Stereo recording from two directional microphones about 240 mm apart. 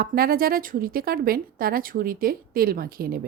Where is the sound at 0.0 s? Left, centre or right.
Right.